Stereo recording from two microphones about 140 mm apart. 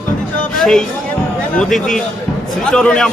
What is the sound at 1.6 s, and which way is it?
A man's voice, 5° left (ahead or behind).